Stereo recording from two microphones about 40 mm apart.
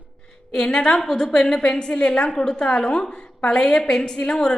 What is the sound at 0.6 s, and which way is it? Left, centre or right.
A woman's voice, left.